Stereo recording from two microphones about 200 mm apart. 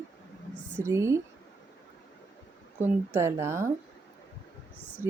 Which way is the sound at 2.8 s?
15° right (ahead or behind).